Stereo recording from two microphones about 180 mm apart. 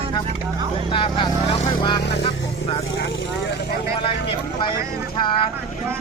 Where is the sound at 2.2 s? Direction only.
30° left (ahead or behind).